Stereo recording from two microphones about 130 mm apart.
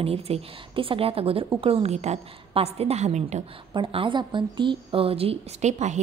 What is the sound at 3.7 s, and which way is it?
A woman's voice, 45° right (ahead or behind).